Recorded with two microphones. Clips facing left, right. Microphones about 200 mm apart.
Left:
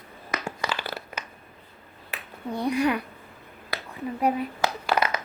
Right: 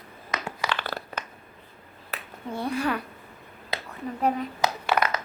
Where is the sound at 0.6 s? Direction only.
5° left (ahead or behind).